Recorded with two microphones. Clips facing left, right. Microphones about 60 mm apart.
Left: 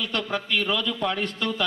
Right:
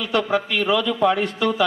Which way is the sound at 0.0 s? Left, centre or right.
Centre.